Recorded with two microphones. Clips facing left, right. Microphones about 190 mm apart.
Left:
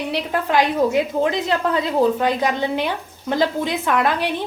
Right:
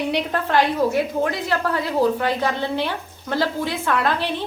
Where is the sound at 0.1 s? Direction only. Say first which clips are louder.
Even; 5° left (ahead or behind).